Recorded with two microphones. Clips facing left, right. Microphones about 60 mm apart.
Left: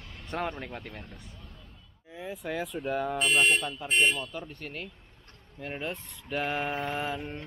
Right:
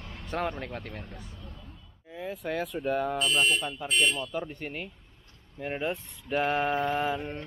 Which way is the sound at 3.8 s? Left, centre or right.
Left.